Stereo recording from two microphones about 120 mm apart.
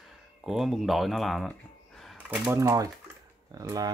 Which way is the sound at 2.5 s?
25° right (ahead or behind).